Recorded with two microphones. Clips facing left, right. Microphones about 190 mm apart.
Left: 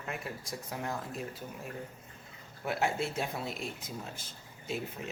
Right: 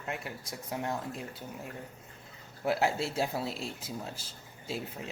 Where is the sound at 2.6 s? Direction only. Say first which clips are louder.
Right 3 dB; 30° right (ahead or behind).